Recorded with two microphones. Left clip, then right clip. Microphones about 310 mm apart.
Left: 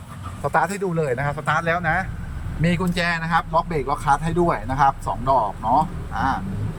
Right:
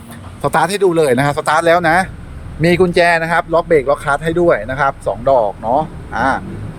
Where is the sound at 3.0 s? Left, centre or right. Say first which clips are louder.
Right 9 dB; centre.